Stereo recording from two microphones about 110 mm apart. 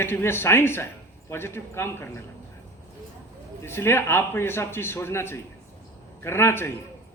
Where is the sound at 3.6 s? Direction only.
20° left (ahead or behind).